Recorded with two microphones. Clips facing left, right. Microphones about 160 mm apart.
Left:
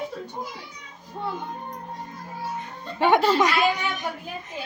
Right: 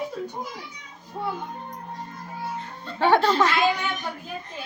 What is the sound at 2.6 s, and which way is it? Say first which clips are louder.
Speech: left 1 dB; 15° left (ahead or behind).